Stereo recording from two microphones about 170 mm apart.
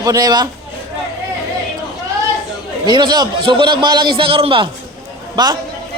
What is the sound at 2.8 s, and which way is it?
A man's voice, 25° right (ahead or behind).